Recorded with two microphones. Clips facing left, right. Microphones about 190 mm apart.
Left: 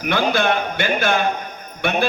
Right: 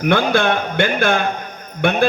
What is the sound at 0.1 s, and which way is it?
A man's voice, 55° right (ahead or behind).